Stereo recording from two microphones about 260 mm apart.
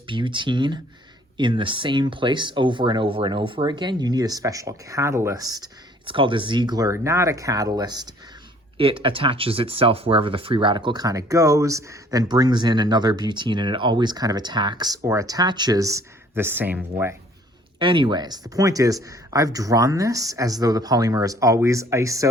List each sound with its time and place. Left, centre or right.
0.1 s speech: centre